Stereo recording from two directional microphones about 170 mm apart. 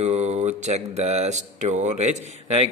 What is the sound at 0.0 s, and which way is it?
Speech, 40° right (ahead or behind).